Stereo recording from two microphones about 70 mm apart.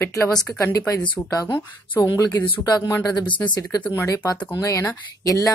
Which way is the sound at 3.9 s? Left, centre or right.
Left.